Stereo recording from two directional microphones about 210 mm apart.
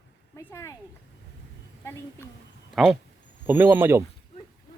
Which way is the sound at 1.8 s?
10° left (ahead or behind).